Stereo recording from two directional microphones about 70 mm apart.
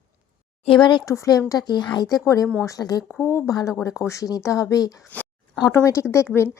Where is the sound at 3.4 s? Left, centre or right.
Left.